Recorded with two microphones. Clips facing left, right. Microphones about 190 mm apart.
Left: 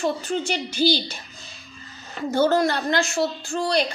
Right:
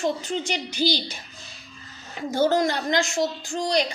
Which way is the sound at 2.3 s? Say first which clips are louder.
Left 2 dB; 15° right (ahead or behind).